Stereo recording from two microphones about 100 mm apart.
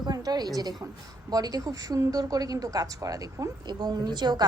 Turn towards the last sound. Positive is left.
turn(degrees=-45)  # may be behind; listen again after turning